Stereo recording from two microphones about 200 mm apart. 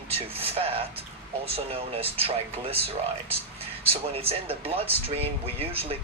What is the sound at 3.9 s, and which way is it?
Speech, 30° right (ahead or behind).